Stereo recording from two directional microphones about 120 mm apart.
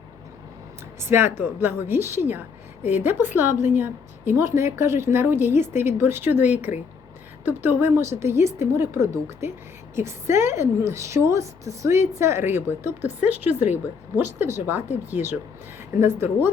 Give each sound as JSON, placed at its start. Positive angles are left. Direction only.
{"t": 0.9, "sound": "a woman's voice", "side_deg": -20}